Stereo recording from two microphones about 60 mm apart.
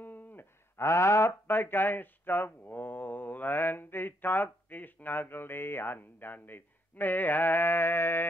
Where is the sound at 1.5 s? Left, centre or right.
Left.